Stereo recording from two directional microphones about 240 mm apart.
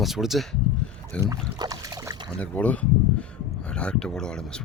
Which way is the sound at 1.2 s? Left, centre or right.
Centre.